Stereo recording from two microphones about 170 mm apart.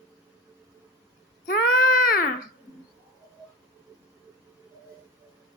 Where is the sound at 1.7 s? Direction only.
55° left (ahead or behind).